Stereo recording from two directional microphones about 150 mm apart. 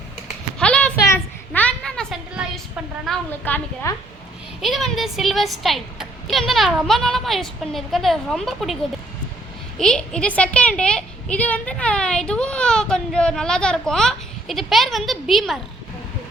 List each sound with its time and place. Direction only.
0.6 s a sound: 5° left (ahead or behind)
3.1 s a woman's voice: 10° left (ahead or behind)
4.6 s a woman's voice: centre (ahead or behind)